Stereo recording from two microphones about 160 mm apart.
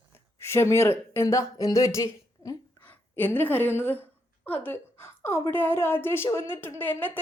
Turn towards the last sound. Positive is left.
turn(degrees=10)  # may be behind; listen again after turning